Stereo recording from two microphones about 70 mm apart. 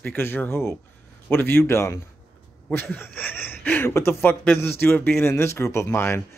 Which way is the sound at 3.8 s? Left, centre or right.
Left.